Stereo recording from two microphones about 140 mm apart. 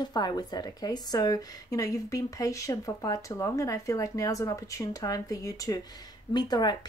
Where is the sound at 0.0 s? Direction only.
30° left (ahead or behind).